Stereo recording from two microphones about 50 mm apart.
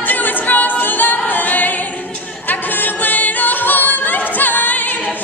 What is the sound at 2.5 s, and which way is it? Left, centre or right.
A capella, left.